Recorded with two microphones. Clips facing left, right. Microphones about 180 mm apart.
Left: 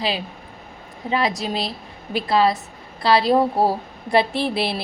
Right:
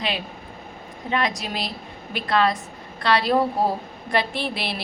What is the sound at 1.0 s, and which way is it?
A woman's voice, 30° left (ahead or behind).